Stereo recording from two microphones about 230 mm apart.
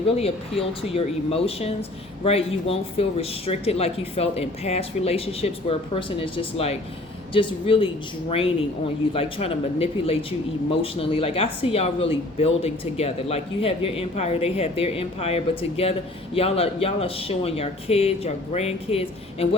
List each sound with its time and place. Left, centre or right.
0.2 s speech: left